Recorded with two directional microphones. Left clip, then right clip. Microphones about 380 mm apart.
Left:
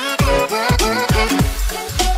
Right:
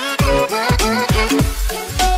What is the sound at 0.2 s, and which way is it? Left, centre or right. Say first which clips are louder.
Music: right 1 dB; centre.